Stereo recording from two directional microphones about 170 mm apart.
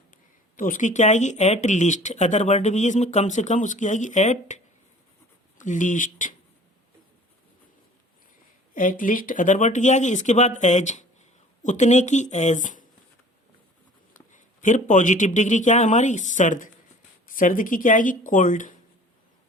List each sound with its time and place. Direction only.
0.5 s speech: 50° left (ahead or behind)
8.7 s speech: 50° left (ahead or behind)
14.3 s speech: 50° left (ahead or behind)